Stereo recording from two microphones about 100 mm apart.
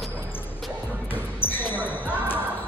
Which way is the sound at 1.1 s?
20° left (ahead or behind).